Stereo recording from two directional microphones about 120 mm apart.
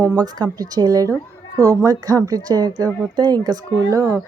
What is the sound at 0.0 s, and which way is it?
A woman's voice, 30° right (ahead or behind).